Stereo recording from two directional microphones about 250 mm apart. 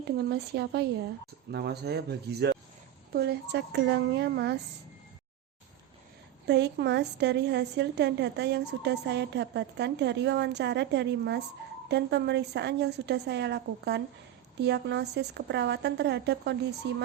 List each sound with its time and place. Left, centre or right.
0.0 s a woman's voice: right
6.5 s a woman's voice: right